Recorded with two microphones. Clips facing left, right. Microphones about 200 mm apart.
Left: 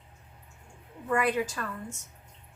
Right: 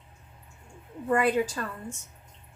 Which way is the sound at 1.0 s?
30° right (ahead or behind).